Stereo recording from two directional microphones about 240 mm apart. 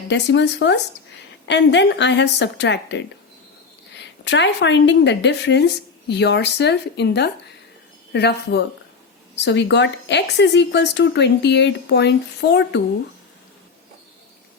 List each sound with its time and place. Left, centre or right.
0.1 s a woman's voice: left